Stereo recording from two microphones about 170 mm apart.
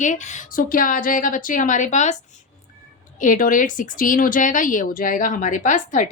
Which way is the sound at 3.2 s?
50° left (ahead or behind).